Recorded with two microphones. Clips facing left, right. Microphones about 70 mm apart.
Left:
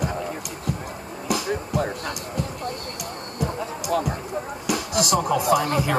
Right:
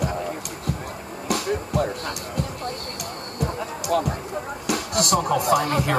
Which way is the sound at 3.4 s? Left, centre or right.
Right.